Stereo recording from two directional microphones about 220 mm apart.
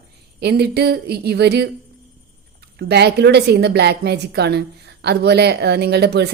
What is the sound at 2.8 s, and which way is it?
Speech, 50° right (ahead or behind).